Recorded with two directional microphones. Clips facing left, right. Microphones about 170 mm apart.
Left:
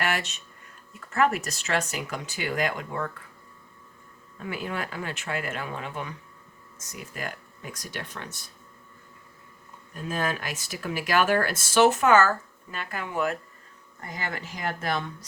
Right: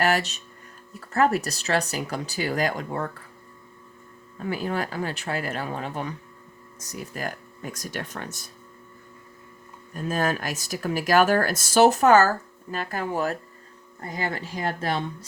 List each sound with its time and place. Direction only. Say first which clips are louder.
0.0 s speech: right 6 dB; 35° right (ahead or behind)
4.4 s speech: right 5 dB; 35° right (ahead or behind)
9.9 s speech: right 4 dB; 45° right (ahead or behind)